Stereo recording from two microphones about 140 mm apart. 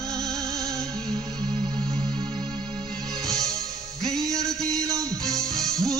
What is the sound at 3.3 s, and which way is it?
Music, 5° left (ahead or behind).